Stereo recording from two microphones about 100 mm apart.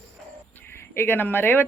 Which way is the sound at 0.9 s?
25° left (ahead or behind).